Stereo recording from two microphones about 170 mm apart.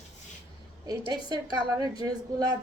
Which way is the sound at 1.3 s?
20° right (ahead or behind).